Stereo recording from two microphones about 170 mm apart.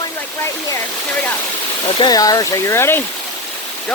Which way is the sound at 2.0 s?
25° left (ahead or behind).